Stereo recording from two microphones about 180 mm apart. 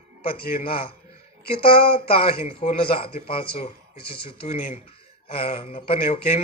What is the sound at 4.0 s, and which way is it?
Speech, 60° left (ahead or behind).